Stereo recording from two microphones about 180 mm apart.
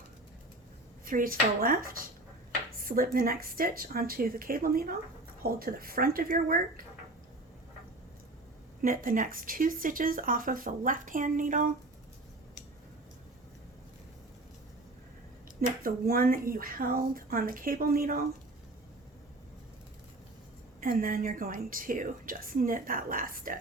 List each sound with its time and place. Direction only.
1.0 s speech: 50° right (ahead or behind)
8.8 s speech: 50° right (ahead or behind)
15.8 s speech: 55° right (ahead or behind)
20.8 s speech: 50° right (ahead or behind)